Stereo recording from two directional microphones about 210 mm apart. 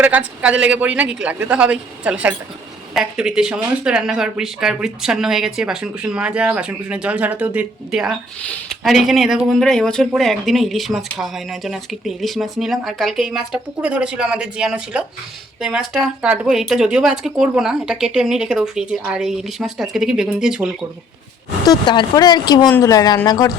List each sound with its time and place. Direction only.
0.0 s speech: 5° right (ahead or behind)
21.6 s speech: 20° left (ahead or behind)